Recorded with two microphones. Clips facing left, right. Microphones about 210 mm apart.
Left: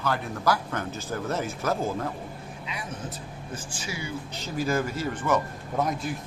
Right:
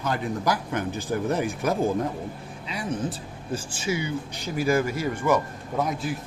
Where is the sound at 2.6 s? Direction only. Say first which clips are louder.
Right 8 dB; 30° right (ahead or behind).